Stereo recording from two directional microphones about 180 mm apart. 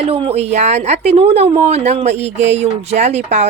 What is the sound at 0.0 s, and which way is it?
A woman's voice, 30° right (ahead or behind).